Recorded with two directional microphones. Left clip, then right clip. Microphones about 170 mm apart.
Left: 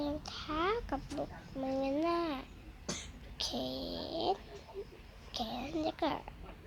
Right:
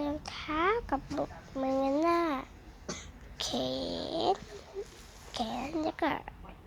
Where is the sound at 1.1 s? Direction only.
25° right (ahead or behind).